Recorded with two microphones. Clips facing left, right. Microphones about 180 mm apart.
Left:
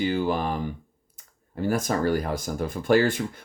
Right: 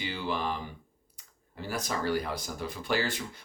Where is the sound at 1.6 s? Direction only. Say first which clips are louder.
Left 9 dB; 50° left (ahead or behind).